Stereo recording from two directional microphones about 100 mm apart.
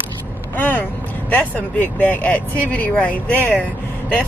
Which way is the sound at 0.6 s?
20° left (ahead or behind).